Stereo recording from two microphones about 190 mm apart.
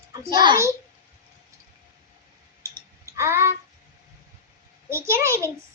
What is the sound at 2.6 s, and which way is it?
Tick, 15° right (ahead or behind).